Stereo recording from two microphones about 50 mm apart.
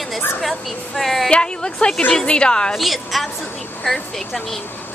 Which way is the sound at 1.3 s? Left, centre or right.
Centre.